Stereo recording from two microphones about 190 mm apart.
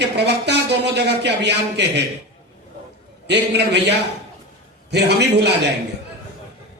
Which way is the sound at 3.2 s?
65° right (ahead or behind).